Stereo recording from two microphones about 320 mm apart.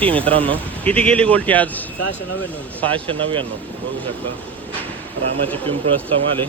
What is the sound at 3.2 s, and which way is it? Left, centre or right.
Speech, centre.